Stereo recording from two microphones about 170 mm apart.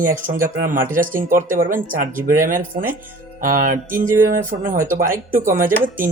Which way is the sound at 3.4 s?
50° right (ahead or behind).